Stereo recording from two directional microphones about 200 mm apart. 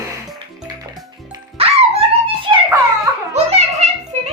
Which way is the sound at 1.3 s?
30° right (ahead or behind).